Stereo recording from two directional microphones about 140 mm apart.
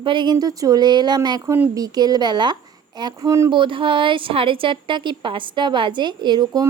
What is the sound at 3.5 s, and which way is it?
A woman's voice, 35° right (ahead or behind).